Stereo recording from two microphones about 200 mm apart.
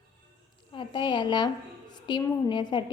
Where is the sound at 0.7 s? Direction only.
25° left (ahead or behind).